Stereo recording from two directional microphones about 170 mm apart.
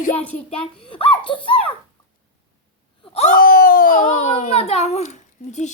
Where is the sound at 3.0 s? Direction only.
35° left (ahead or behind).